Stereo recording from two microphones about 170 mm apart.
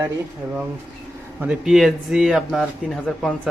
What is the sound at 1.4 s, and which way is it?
Speech, 5° right (ahead or behind).